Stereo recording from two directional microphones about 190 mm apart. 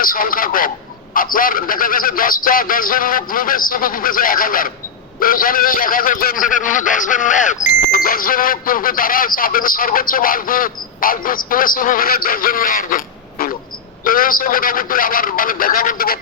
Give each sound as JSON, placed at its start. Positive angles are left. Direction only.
{"t": 0.0, "sound": "speech", "side_deg": 50}